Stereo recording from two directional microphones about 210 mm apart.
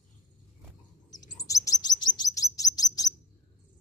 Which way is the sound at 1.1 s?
15° left (ahead or behind).